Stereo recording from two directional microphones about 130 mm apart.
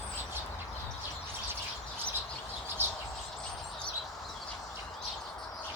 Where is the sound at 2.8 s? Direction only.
15° right (ahead or behind).